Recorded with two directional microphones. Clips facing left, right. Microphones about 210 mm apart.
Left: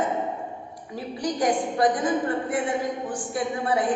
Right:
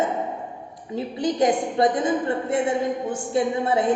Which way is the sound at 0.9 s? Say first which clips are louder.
Right 5 dB; 25° right (ahead or behind).